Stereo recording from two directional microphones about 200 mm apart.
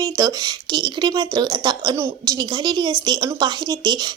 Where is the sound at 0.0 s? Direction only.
20° right (ahead or behind).